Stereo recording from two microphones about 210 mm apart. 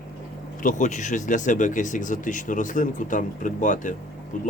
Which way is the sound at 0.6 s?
35° left (ahead or behind).